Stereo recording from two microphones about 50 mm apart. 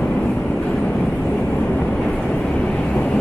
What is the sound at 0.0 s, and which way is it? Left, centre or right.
Vehicle, left.